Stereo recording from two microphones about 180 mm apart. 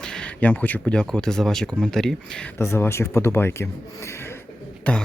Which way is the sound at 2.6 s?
15° left (ahead or behind).